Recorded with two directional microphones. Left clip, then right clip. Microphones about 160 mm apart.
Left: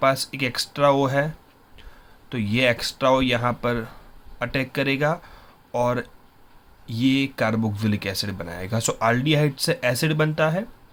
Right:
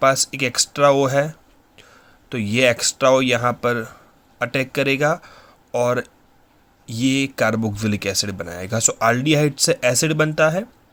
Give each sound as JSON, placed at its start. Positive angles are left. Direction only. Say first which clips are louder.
{"t": 0.0, "sound": "speech", "louder": "right 4 dB", "side_deg": -35}